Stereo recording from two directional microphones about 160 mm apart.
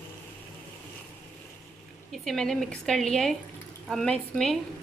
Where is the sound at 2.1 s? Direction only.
Centre (ahead or behind).